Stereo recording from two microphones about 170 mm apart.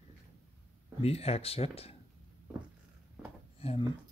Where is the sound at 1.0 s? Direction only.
35° left (ahead or behind).